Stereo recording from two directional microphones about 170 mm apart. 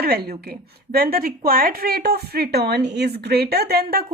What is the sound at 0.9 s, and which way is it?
A woman's voice, 60° right (ahead or behind).